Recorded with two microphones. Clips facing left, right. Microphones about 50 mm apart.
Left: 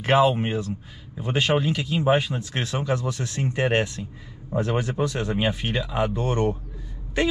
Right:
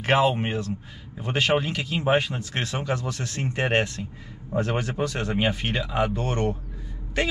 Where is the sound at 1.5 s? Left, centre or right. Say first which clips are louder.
Left 2 dB; right.